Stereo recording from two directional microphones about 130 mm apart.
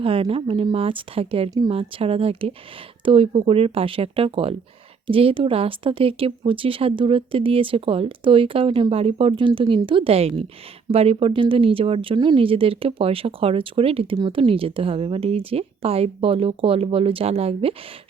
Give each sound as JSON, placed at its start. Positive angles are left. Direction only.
{"t": 0.0, "sound": "speech", "side_deg": -45}
{"t": 1.5, "sound": "speech", "side_deg": -30}
{"t": 1.7, "sound": "speech", "side_deg": -45}